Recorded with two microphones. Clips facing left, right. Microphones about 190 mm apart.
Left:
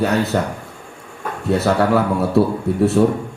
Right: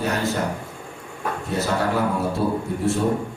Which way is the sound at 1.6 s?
65° left (ahead or behind).